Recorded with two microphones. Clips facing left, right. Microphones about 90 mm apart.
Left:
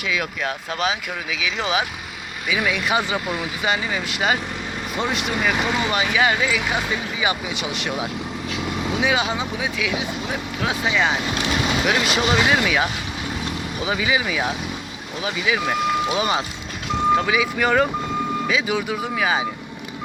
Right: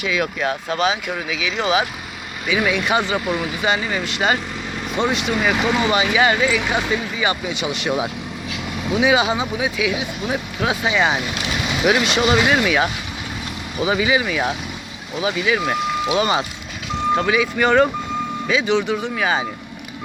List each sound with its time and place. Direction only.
0.0 s speech: centre (ahead or behind)